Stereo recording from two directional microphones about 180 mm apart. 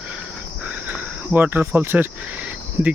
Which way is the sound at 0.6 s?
10° right (ahead or behind).